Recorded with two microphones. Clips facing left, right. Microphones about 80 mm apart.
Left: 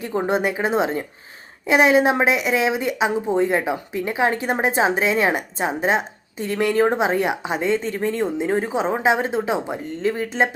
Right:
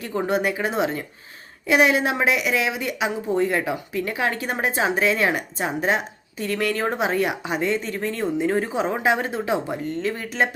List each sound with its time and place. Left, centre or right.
0.0 s speech: left